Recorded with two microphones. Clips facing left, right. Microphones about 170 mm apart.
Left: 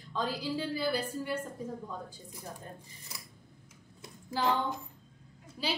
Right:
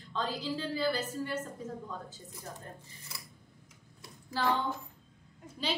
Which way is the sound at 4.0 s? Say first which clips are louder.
Left 1 dB; 15° left (ahead or behind).